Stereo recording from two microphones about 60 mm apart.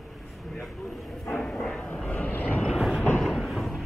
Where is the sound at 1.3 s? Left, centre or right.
Centre.